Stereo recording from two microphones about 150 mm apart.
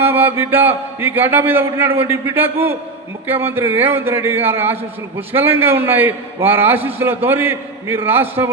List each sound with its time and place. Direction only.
0.0 s a man's voice: 15° right (ahead or behind)